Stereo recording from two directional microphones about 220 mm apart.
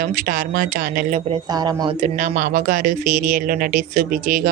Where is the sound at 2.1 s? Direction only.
35° right (ahead or behind).